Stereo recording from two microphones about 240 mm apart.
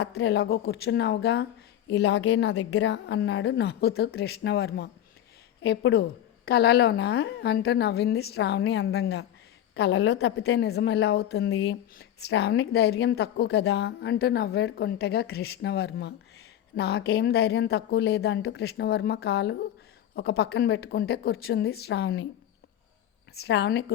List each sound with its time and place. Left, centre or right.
0.0 s a woman's voice: left
23.3 s a woman's voice: left